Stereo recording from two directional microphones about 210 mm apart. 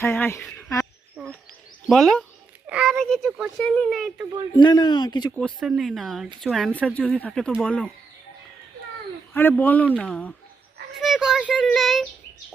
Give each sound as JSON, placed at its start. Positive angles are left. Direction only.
{"t": 0.0, "sound": "speech", "side_deg": 10}
{"t": 1.2, "sound": "wild animals", "side_deg": -5}
{"t": 1.9, "sound": "speech", "side_deg": 0}
{"t": 4.5, "sound": "speech", "side_deg": 20}
{"t": 5.4, "sound": "speech", "side_deg": 0}
{"t": 9.3, "sound": "a man's voice", "side_deg": 10}